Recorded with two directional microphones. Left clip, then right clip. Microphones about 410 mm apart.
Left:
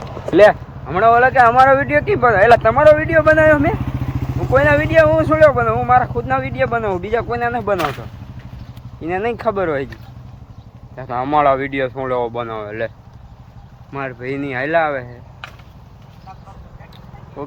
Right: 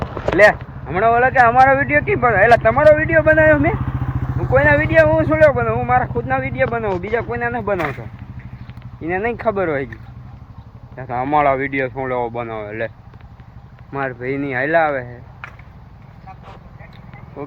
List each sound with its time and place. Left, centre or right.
0.3 s speech: centre
3.8 s vehicle: left
4.5 s speech: centre
13.9 s speech: centre